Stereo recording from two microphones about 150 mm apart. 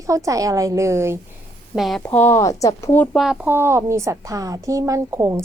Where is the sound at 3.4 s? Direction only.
15° right (ahead or behind).